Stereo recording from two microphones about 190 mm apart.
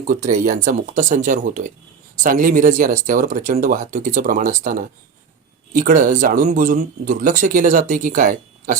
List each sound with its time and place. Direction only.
0.1 s speech: 40° right (ahead or behind)